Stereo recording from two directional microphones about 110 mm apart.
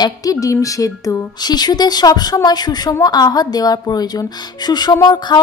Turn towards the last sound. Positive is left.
turn(degrees=35)  # may be behind; listen again after turning